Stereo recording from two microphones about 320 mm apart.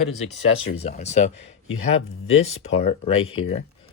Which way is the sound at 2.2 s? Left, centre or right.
Centre.